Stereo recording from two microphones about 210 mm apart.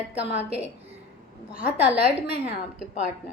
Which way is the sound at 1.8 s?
30° right (ahead or behind).